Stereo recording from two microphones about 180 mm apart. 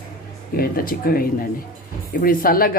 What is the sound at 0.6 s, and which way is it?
Speech, 55° left (ahead or behind).